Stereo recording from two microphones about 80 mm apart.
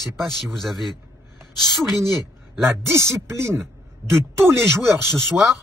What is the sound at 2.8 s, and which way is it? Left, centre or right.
Speech, right.